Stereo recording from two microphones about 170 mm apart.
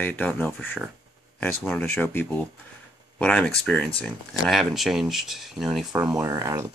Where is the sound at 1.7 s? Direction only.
10° left (ahead or behind); by 6.3 s 5° right (ahead or behind).